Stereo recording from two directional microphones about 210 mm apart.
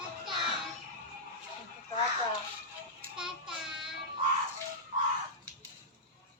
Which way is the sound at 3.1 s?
5° right (ahead or behind).